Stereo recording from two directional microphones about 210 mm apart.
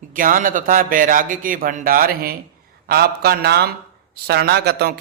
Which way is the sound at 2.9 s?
50° right (ahead or behind).